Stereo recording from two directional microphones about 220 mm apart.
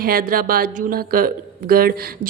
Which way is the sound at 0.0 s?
40° right (ahead or behind).